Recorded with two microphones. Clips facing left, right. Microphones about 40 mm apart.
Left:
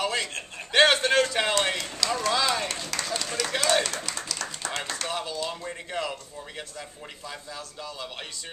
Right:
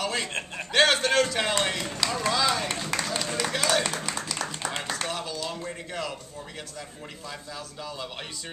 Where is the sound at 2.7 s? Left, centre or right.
Centre.